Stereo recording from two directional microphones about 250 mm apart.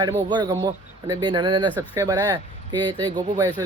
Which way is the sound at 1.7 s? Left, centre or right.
Centre.